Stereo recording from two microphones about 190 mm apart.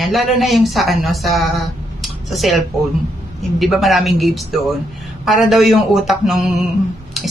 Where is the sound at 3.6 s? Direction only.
Centre (ahead or behind).